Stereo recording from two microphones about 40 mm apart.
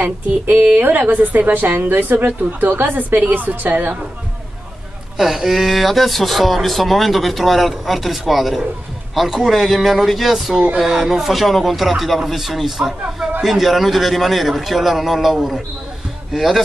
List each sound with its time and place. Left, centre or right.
0.0 s a woman's voice: right
5.1 s speech: centre
9.3 s a man's voice: centre
9.6 s a man's voice: centre